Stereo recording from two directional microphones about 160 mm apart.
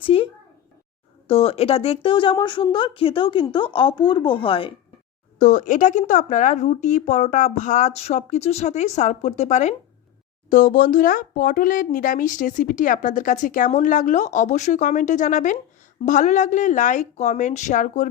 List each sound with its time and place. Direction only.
0.0 s a child's voice: 35° left (ahead or behind)
1.3 s a woman's voice: 40° left (ahead or behind)
5.4 s speech: 50° left (ahead or behind)